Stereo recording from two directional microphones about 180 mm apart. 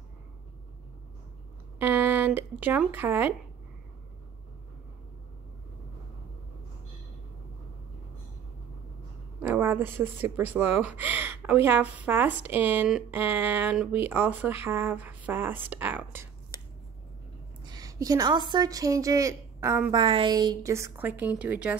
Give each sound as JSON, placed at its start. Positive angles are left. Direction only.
{"t": 1.8, "sound": "speech", "side_deg": -10}
{"t": 9.4, "sound": "speech", "side_deg": -10}
{"t": 17.6, "sound": "a woman's voice", "side_deg": -20}
{"t": 20.0, "sound": "speech", "side_deg": -30}